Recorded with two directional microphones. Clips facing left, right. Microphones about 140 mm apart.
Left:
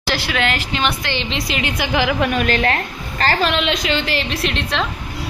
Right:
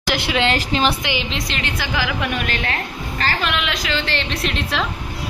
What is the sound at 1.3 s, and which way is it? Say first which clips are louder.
Speech: left 3 dB; 10° left (ahead or behind).